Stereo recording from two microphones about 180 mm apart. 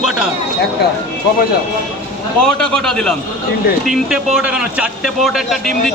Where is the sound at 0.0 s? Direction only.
5° right (ahead or behind).